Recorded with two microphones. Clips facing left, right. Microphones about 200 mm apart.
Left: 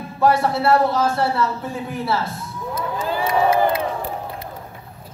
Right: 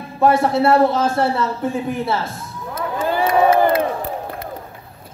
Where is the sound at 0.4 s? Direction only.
25° right (ahead or behind).